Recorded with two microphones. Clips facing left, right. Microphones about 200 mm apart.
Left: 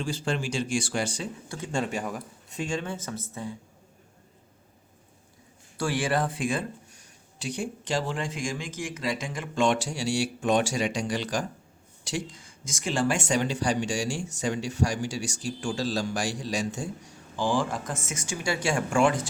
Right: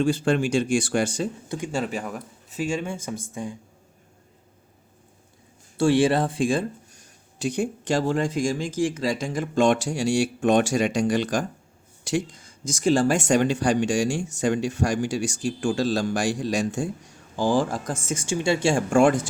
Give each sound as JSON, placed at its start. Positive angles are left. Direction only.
{"t": 0.0, "sound": "speech", "side_deg": -55}
{"t": 1.5, "sound": "speech", "side_deg": -15}
{"t": 1.8, "sound": "speech", "side_deg": 0}
{"t": 5.7, "sound": "speech", "side_deg": -25}
{"t": 7.3, "sound": "speech", "side_deg": -50}
{"t": 12.6, "sound": "speech", "side_deg": -35}
{"t": 17.3, "sound": "speech", "side_deg": -40}